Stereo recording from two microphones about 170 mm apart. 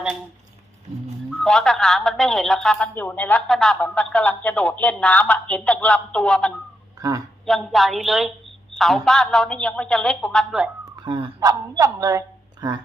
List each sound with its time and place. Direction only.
1.4 s speech: 5° left (ahead or behind)
7.0 s speech: 20° right (ahead or behind)
7.4 s a man's voice: centre (ahead or behind)
10.9 s a woman's voice: 25° right (ahead or behind)